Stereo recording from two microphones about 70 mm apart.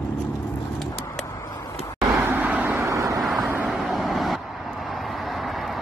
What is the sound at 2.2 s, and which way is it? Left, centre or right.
Vehicle, right.